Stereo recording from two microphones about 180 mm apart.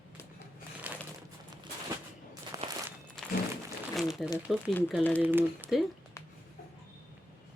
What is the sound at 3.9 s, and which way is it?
Crumpling, centre (ahead or behind).